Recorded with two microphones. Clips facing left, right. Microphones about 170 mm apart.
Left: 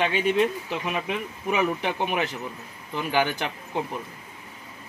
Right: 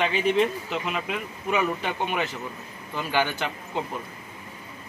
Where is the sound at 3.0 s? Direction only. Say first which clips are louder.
Left 1 dB; 15° left (ahead or behind).